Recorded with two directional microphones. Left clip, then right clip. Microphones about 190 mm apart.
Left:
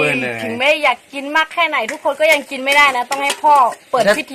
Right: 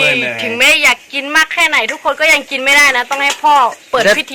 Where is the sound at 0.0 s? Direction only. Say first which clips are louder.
Right 4 dB; 35° left (ahead or behind).